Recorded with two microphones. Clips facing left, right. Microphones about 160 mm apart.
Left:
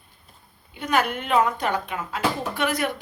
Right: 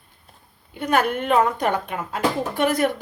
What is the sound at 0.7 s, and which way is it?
Speech, 50° right (ahead or behind).